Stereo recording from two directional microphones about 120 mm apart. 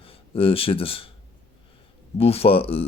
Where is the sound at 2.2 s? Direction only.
55° left (ahead or behind).